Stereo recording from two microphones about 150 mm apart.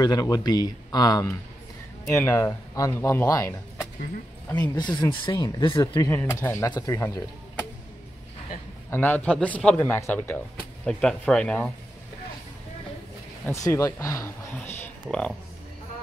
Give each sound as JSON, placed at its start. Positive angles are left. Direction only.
{"t": 0.0, "sound": "speech", "side_deg": 25}
{"t": 4.6, "sound": "speech", "side_deg": 30}
{"t": 6.0, "sound": "speech", "side_deg": 15}
{"t": 8.9, "sound": "speech", "side_deg": 10}
{"t": 13.5, "sound": "speech", "side_deg": 20}